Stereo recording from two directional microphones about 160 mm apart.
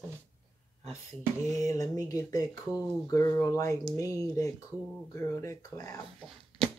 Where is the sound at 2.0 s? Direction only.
20° left (ahead or behind).